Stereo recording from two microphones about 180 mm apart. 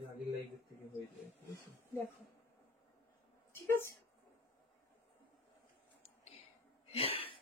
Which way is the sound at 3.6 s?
15° left (ahead or behind).